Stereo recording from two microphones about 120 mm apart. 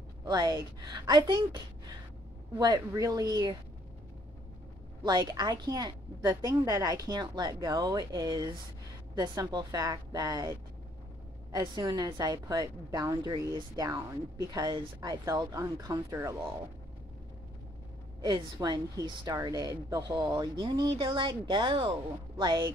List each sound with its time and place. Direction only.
0.2 s a woman's voice: 30° right (ahead or behind)
5.0 s a woman's voice: 35° right (ahead or behind)
11.5 s a woman's voice: 30° right (ahead or behind)
18.2 s a woman's voice: 35° right (ahead or behind)